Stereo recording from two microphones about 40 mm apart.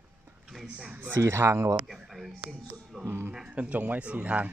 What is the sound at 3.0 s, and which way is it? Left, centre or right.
Speech, right.